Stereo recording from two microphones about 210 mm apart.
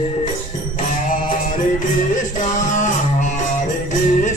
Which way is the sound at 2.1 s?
35° left (ahead or behind).